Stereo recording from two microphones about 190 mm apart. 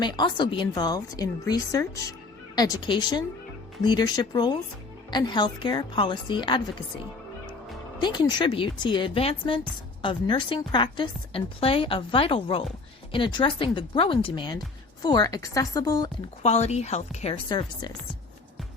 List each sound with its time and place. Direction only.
0.0 s a woman's voice: 25° left (ahead or behind)
7.9 s a woman's voice: 20° left (ahead or behind)
16.4 s a woman's voice: 35° left (ahead or behind)